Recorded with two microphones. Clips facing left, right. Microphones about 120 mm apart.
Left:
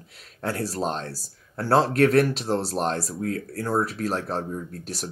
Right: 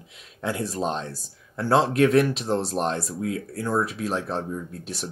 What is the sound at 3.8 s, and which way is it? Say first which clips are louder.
Speech: even; 40° left (ahead or behind).